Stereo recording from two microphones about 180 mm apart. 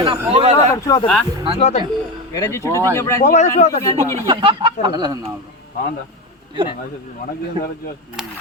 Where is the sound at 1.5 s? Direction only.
40° left (ahead or behind).